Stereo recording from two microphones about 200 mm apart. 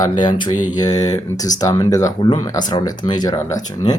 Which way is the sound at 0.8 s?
20° left (ahead or behind).